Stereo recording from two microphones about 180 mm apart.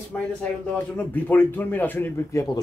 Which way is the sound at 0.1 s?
10° left (ahead or behind).